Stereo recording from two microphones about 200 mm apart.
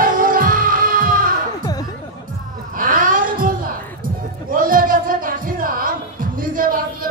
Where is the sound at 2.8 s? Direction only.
45° right (ahead or behind).